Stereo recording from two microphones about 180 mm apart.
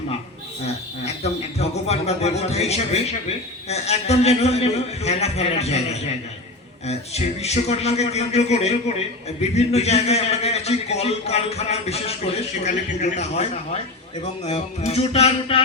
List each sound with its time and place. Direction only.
0.6 s a man's voice: 35° left (ahead or behind)